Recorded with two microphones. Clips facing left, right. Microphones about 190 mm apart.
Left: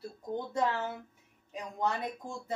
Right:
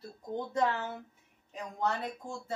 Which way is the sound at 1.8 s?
15° left (ahead or behind).